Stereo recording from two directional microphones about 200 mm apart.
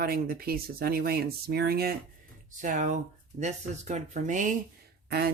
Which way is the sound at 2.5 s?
40° right (ahead or behind).